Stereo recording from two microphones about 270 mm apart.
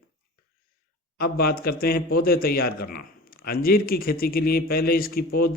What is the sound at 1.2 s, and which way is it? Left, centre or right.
Speech, left.